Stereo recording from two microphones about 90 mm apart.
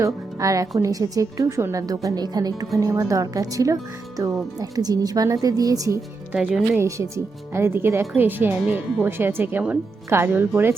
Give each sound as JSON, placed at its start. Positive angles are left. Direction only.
{"t": 0.0, "sound": "a woman's voice", "side_deg": -40}
{"t": 6.3, "sound": "speech", "side_deg": -10}
{"t": 6.7, "sound": "a woman's voice", "side_deg": -35}